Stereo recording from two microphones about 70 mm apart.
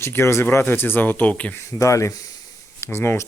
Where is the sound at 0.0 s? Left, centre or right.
Left.